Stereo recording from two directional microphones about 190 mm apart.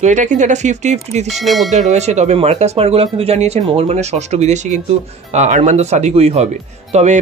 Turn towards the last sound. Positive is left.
turn(degrees=-35)  # may be behind; listen again after turning